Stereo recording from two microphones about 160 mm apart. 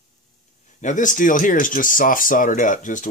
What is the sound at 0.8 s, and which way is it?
Speech, 50° left (ahead or behind).